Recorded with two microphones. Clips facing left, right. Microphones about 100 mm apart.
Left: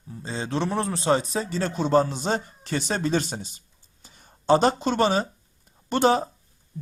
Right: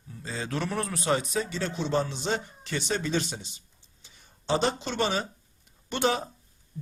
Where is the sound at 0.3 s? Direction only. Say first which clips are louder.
Left 4 dB; 25° left (ahead or behind).